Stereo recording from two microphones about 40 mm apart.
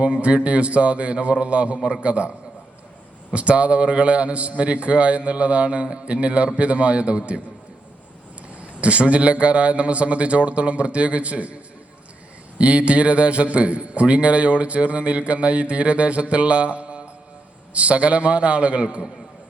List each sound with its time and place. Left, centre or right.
0.0 s a man's voice: right
3.3 s a man's voice: right
8.8 s a man's voice: right
12.5 s a man's voice: right